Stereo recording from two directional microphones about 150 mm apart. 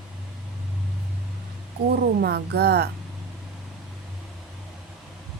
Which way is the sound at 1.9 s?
90° right.